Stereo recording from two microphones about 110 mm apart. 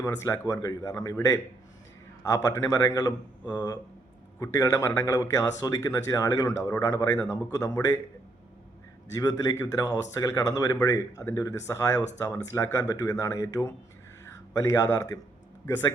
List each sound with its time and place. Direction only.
0.0 s speech: 25° left (ahead or behind)
2.2 s a man's voice: 30° left (ahead or behind)
9.1 s a man's voice: 30° left (ahead or behind)